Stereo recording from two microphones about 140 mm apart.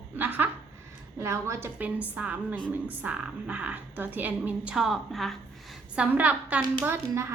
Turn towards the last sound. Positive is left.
turn(degrees=-15)  # may be behind; listen again after turning